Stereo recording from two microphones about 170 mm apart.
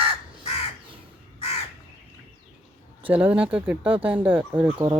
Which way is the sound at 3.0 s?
10° right (ahead or behind).